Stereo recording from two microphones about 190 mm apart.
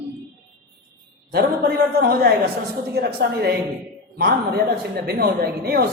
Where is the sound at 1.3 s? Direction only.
55° right (ahead or behind).